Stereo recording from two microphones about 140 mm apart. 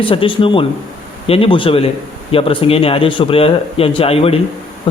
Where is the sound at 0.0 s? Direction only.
40° left (ahead or behind).